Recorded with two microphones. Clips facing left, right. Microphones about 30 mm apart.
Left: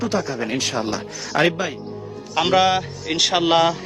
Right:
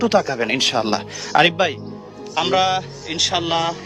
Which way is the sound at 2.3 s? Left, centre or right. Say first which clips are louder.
Left 1 dB; centre.